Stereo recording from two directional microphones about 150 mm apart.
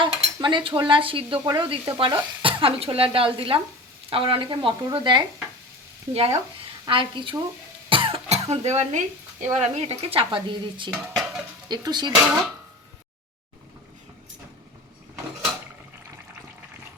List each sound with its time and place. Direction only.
0.0 s speech: 30° right (ahead or behind)
7.9 s cough: 35° right (ahead or behind)
9.6 s speech: 45° right (ahead or behind)
10.9 s speech: 5° right (ahead or behind)
11.7 s speech: 30° right (ahead or behind)